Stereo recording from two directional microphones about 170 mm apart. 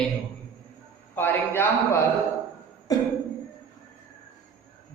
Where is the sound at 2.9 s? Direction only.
20° left (ahead or behind).